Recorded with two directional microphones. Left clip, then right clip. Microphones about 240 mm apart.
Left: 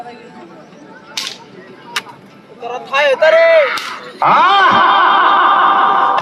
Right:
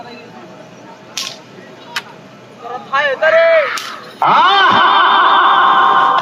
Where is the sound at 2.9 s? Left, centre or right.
Left.